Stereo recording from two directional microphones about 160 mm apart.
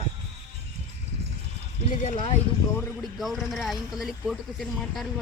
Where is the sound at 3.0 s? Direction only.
Centre (ahead or behind).